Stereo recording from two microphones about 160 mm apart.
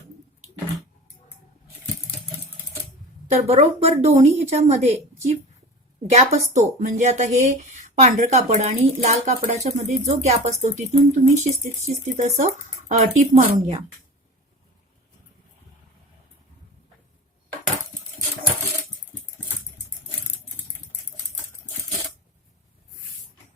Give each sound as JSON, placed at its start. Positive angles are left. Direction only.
{"t": 3.2, "sound": "a woman's voice", "side_deg": -40}